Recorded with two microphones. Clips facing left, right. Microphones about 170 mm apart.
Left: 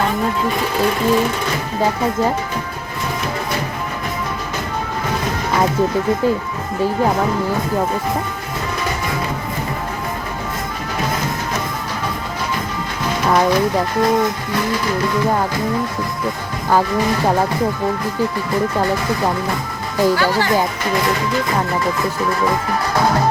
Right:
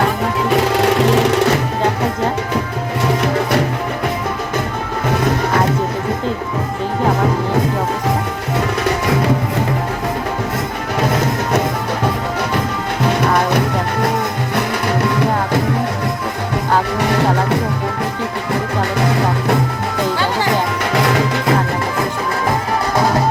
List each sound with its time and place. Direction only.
0.5 s music: 80° right
20.9 s music: 75° right (ahead or behind)